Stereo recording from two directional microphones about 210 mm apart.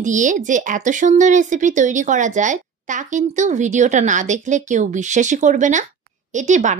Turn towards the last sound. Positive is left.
turn(degrees=-35)  # may be behind; listen again after turning